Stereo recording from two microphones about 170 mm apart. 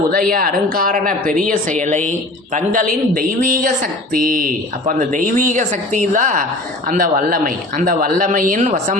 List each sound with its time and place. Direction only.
0.1 s speech: 55° right (ahead or behind)